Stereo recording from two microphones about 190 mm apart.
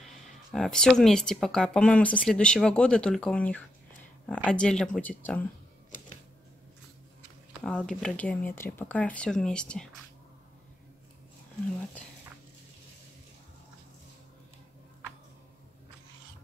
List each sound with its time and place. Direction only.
0.0 s speech: centre (ahead or behind)
5.9 s typewriter: 45° left (ahead or behind)
7.6 s speech: 5° left (ahead or behind)